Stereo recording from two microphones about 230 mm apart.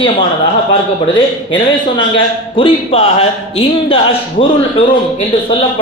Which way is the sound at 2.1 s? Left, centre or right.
Left.